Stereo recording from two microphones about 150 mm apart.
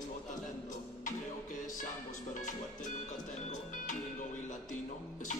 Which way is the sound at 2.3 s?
60° left (ahead or behind).